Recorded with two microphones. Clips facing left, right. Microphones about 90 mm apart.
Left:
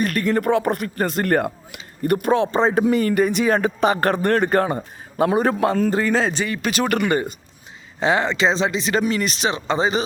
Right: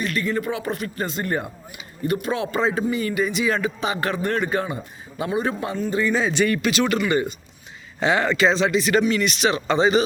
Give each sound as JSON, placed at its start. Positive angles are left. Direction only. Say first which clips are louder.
{"t": 0.0, "sound": "speech", "louder": "left 4 dB", "side_deg": 50}
{"t": 2.0, "sound": "speech", "louder": "left 5 dB", "side_deg": 50}
{"t": 2.4, "sound": "speech", "louder": "left 5 dB", "side_deg": 30}
{"t": 2.8, "sound": "speech", "louder": "left 5 dB", "side_deg": 55}
{"t": 7.9, "sound": "speech", "louder": "left 1 dB", "side_deg": 30}